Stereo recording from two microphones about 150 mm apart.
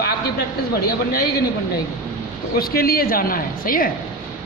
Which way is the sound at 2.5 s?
80° left.